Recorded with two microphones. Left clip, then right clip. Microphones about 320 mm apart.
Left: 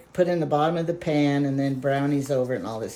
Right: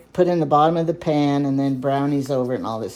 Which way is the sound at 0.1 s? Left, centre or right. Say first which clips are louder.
Right 5 dB; centre.